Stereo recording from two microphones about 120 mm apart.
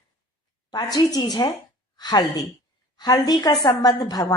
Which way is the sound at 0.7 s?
35° left (ahead or behind).